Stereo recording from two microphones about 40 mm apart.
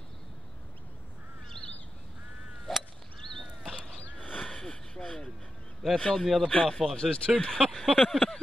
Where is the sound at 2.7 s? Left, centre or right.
Centre.